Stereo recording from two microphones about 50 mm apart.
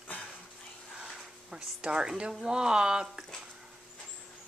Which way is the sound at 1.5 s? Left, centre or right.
Centre.